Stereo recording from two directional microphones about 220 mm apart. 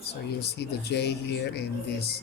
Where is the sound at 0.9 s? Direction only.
50° left (ahead or behind).